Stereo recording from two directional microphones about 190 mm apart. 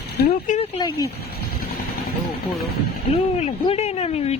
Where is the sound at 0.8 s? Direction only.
20° left (ahead or behind).